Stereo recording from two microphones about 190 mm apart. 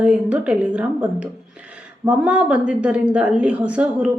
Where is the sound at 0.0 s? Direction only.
5° right (ahead or behind).